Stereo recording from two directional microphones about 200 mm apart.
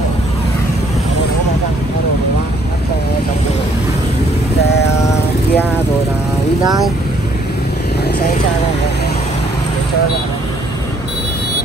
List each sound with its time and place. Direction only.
4.6 s vehicle: 55° left (ahead or behind)
5.0 s vehicle: 15° left (ahead or behind)